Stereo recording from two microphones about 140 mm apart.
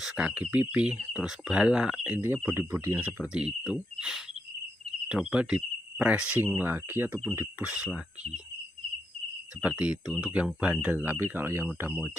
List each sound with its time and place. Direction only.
0.0 s speech: 5° right (ahead or behind)
9.6 s speech: 10° right (ahead or behind)